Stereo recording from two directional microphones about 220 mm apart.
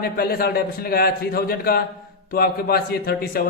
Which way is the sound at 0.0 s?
45° left (ahead or behind).